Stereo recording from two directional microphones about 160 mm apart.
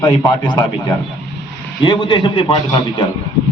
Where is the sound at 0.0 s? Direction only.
20° left (ahead or behind).